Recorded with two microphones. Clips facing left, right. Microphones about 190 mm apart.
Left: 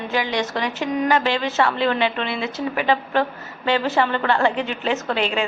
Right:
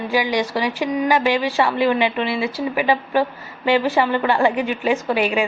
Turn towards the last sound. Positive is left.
turn(degrees=-15)  # may be behind; listen again after turning